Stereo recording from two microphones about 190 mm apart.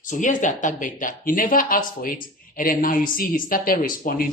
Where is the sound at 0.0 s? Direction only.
40° left (ahead or behind).